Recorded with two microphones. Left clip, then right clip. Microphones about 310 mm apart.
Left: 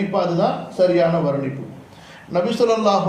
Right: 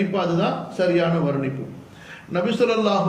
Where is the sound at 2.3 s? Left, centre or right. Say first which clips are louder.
Left 3 dB; centre.